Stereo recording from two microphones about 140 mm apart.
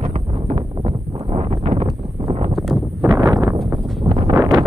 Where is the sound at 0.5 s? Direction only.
45° right (ahead or behind).